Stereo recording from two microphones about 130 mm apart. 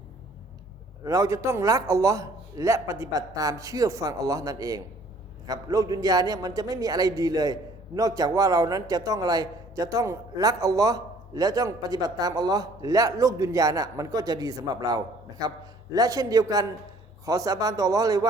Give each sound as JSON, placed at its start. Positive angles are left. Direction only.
{"t": 1.0, "sound": "a man's voice", "side_deg": -25}